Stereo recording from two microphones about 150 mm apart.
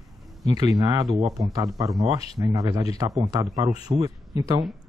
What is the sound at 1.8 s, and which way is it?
Speech, centre (ahead or behind).